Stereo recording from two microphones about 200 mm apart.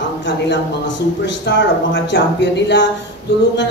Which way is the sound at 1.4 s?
60° left (ahead or behind).